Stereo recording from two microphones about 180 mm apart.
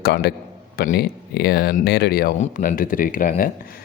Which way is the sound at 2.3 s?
45° left (ahead or behind).